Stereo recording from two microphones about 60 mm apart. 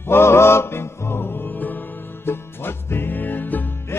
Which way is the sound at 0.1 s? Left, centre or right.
Left.